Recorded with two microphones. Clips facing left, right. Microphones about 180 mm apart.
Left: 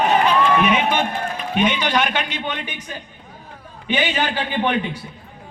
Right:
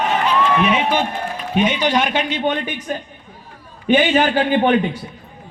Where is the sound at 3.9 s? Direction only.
45° right (ahead or behind).